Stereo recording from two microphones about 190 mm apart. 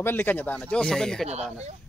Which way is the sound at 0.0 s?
10° left (ahead or behind).